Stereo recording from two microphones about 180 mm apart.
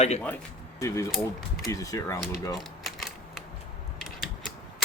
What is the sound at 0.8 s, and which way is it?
Speech, 15° left (ahead or behind).